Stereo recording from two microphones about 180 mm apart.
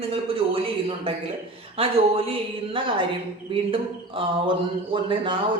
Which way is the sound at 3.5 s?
30° right (ahead or behind).